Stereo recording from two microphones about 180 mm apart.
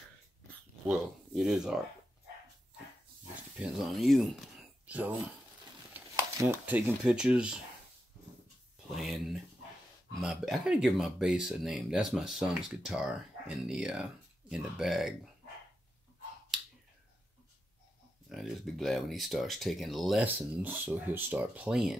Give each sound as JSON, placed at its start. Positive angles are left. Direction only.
{"t": 0.8, "sound": "speech", "side_deg": 0}
{"t": 3.5, "sound": "speech", "side_deg": 0}
{"t": 8.9, "sound": "speech", "side_deg": 0}
{"t": 18.3, "sound": "speech", "side_deg": 0}